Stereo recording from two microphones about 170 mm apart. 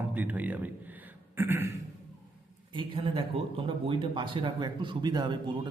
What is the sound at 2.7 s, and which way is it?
Speech, 30° right (ahead or behind).